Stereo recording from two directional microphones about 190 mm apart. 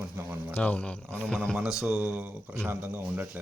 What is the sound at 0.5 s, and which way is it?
Speech, 5° left (ahead or behind).